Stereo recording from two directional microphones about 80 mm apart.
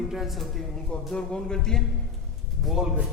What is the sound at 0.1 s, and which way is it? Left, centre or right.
Speech, centre.